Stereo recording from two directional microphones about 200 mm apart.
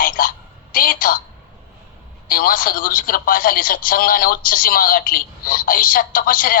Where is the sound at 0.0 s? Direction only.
45° left (ahead or behind).